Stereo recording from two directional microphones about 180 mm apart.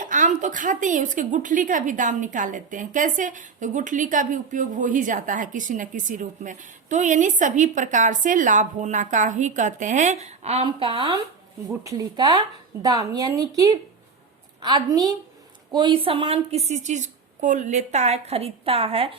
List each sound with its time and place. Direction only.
0.0 s a woman's voice: 45° right (ahead or behind)